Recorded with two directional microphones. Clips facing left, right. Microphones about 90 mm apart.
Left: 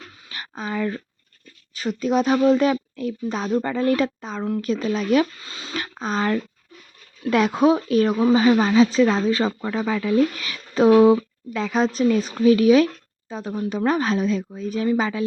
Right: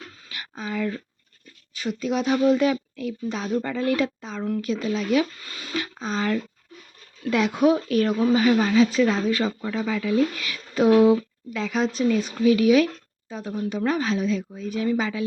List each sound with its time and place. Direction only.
0.3 s a sound: 35° left (ahead or behind)
1.7 s speech: 40° left (ahead or behind)
5.4 s speech: 25° left (ahead or behind)
5.7 s speech: 45° left (ahead or behind)
7.9 s speech: 25° left (ahead or behind)
9.5 s speech: 50° left (ahead or behind)
10.5 s speech: 30° left (ahead or behind)